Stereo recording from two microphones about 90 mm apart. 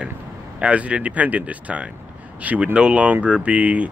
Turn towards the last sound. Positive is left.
turn(degrees=-15)  # may be behind; listen again after turning